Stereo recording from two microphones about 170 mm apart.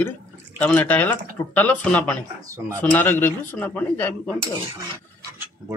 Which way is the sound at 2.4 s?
20° right (ahead or behind).